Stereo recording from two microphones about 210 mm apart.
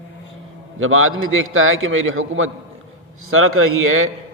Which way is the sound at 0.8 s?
75° right (ahead or behind).